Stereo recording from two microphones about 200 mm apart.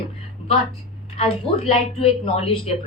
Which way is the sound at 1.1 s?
30° left (ahead or behind).